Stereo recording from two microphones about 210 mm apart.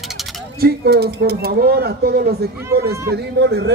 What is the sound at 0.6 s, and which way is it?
Speech, 50° right (ahead or behind).